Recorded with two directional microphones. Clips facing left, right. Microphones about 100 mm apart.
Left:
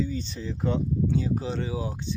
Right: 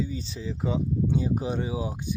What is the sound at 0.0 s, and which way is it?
Speech, 5° right (ahead or behind).